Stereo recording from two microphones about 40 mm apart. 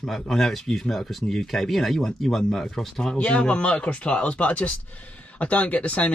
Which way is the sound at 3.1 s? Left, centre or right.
Left.